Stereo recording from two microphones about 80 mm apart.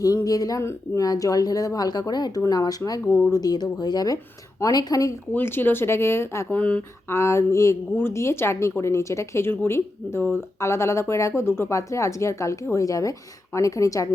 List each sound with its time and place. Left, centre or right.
0.0 s speech: left
0.6 s speech: left
1.0 s speech: left
5.3 s speech: left
6.5 s speech: centre
7.1 s speech: left